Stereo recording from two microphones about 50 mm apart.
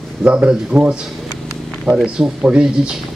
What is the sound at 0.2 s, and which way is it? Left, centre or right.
Speech, right.